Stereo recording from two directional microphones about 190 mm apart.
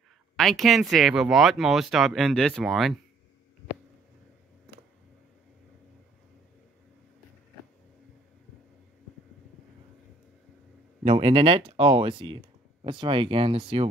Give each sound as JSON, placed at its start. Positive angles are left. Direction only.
{"t": 0.4, "sound": "speech", "side_deg": 0}
{"t": 11.1, "sound": "speech", "side_deg": -30}